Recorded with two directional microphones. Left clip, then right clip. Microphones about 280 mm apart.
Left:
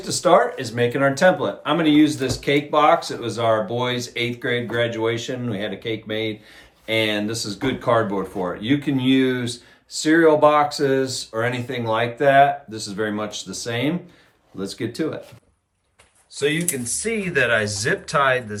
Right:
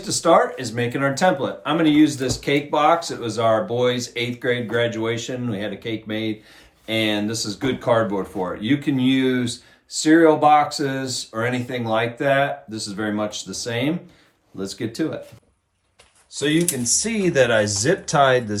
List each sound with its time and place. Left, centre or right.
0.0 s speech: centre
16.3 s speech: centre